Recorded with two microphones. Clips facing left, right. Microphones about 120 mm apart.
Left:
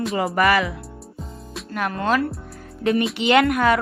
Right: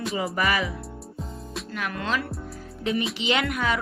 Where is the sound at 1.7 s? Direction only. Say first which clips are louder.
Left 7 dB; 45° left (ahead or behind).